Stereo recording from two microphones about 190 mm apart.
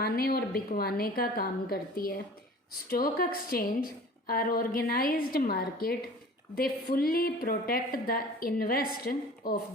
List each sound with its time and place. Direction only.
0.0 s a woman's voice: 55° left (ahead or behind)